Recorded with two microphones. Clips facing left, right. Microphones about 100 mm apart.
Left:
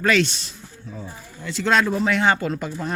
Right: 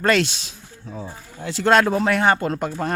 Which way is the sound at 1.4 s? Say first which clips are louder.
Right 3 dB; 55° right (ahead or behind).